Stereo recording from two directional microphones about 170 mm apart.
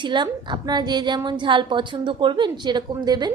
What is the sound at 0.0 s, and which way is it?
A woman's voice, 25° right (ahead or behind).